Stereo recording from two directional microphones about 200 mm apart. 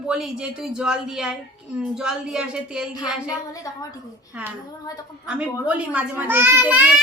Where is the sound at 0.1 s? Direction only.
5° right (ahead or behind).